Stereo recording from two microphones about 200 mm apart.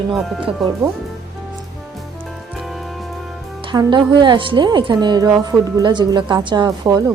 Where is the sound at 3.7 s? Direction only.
20° right (ahead or behind).